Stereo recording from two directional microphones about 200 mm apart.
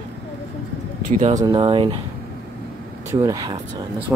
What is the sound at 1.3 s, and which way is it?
Speech, 20° right (ahead or behind).